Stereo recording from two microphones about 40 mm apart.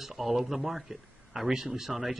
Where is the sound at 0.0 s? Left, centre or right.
Centre.